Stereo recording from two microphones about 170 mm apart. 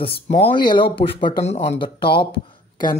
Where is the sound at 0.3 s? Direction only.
35° left (ahead or behind).